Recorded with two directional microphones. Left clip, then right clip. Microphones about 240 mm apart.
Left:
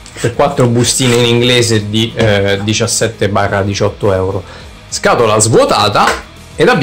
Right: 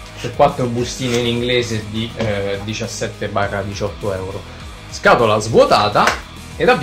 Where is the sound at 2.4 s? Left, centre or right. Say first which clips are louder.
Left 9 dB; left.